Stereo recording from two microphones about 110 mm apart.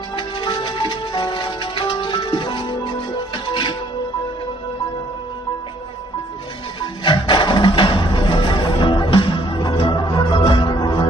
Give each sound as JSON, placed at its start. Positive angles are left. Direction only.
{"t": 0.2, "sound": "music", "side_deg": 45}
{"t": 6.7, "sound": "music", "side_deg": 45}